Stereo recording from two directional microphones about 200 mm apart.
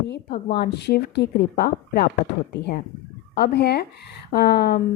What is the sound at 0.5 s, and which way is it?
Speech, 55° left (ahead or behind).